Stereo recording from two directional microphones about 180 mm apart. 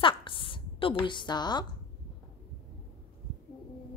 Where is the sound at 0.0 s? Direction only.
30° left (ahead or behind).